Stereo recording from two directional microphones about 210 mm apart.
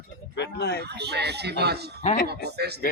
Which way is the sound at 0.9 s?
50° right (ahead or behind).